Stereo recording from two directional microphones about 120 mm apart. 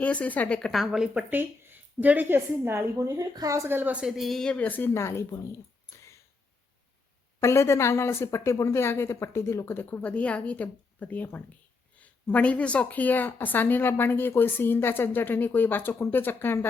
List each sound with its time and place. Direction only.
0.0 s speech: 10° left (ahead or behind); by 1.2 s 5° right (ahead or behind)
1.3 s a woman's voice: 15° right (ahead or behind); by 5.5 s 25° left (ahead or behind)
7.4 s speech: 20° left (ahead or behind)